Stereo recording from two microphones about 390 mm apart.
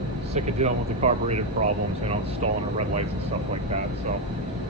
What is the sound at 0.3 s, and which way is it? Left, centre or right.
Speech, centre.